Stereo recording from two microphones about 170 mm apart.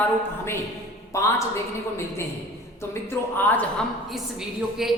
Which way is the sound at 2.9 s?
15° left (ahead or behind).